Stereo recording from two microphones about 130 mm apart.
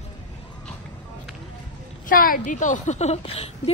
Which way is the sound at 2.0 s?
90° left.